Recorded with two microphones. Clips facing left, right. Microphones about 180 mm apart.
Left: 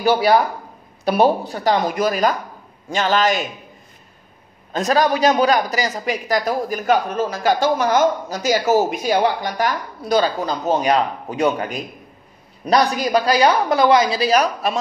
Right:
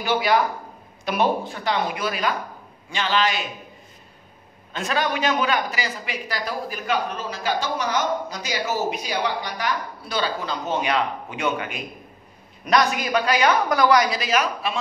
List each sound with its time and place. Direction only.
0.0 s a woman's voice: 40° left (ahead or behind)
4.7 s a man's voice: 40° left (ahead or behind)